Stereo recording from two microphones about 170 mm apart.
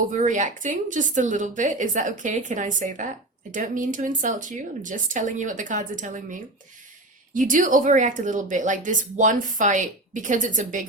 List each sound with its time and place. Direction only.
0.1 s speech: 45° right (ahead or behind)
7.3 s speech: 50° right (ahead or behind)